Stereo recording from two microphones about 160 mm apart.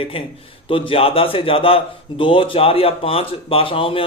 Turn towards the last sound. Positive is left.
turn(degrees=35)  # may be behind; listen again after turning